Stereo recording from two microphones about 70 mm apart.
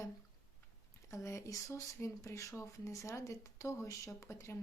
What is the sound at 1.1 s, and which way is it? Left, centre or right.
Speech, left.